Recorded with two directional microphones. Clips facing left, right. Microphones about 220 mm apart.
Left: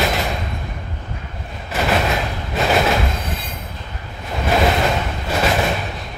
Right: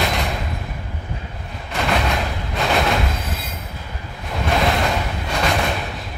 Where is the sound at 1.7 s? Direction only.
5° left (ahead or behind).